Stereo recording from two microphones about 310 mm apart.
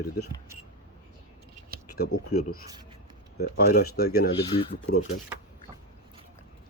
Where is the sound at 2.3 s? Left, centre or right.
Left.